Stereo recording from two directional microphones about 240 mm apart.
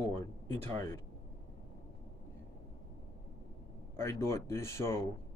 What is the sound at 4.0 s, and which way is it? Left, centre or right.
Speech, centre.